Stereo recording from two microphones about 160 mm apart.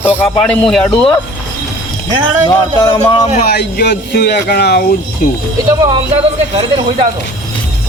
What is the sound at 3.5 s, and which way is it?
Speech, 90° left.